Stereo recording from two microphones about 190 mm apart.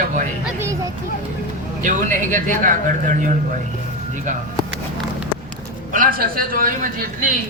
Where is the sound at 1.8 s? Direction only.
45° right (ahead or behind).